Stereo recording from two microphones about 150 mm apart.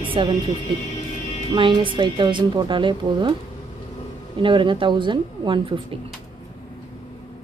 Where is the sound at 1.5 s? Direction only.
35° right (ahead or behind).